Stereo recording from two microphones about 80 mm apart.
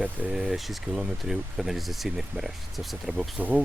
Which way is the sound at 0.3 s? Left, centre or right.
Centre.